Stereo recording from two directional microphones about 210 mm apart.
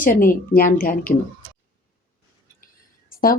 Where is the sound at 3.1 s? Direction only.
45° left (ahead or behind).